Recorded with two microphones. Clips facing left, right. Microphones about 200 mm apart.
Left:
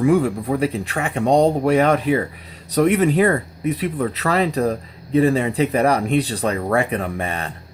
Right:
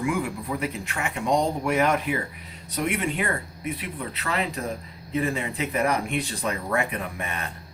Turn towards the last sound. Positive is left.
turn(degrees=30)  # may be behind; listen again after turning